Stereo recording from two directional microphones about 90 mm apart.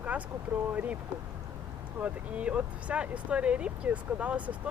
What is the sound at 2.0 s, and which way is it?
Speech, 15° right (ahead or behind).